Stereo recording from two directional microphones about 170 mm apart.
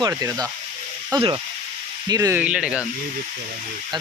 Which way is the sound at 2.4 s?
5° right (ahead or behind).